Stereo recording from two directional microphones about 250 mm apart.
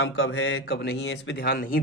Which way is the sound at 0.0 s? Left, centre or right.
Left.